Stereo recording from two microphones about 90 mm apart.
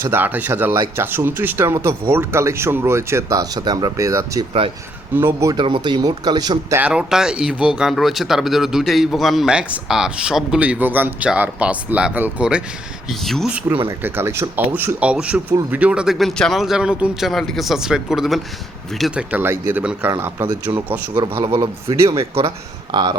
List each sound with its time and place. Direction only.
0.0 s speech: 25° right (ahead or behind); by 4.0 s 50° right (ahead or behind)
4.0 s speech: 35° right (ahead or behind)
5.6 s speech: 65° right (ahead or behind)
6.7 s speech: 10° right (ahead or behind)
13.1 s speech: centre (ahead or behind)
14.0 s speech: 25° right (ahead or behind); by 17.2 s 10° right (ahead or behind)
17.2 s speech: centre (ahead or behind)
19.1 s speech: 20° right (ahead or behind)
21.2 s a man's voice: 80° right
21.6 s speech: 35° right (ahead or behind)
22.4 s speech: 75° right (ahead or behind); by 23.1 s 55° right (ahead or behind)